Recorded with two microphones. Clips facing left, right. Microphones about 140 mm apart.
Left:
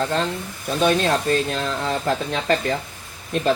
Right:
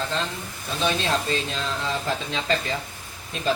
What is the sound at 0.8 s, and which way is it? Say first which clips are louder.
Speech: left 6 dB; 50° left (ahead or behind).